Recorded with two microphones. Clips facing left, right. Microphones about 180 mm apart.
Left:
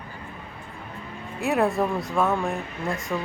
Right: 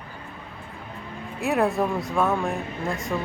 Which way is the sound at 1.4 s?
Centre (ahead or behind).